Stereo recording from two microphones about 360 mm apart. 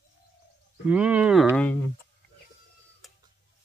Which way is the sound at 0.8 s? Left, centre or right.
Centre.